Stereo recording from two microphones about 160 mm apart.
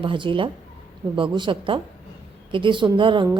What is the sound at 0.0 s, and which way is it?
A woman's voice, 30° right (ahead or behind).